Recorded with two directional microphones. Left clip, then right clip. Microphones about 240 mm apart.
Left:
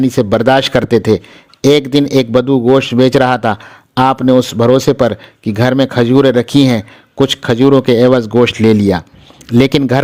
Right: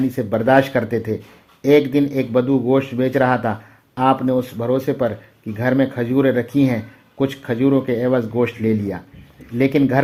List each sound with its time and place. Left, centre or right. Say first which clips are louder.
0.2 s a man's voice: left 5 dB; left